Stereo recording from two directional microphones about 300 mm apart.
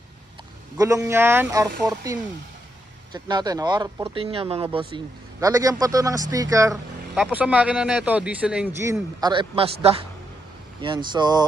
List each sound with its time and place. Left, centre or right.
0.8 s a man's voice: centre
3.1 s a man's voice: centre
10.8 s a man's voice: centre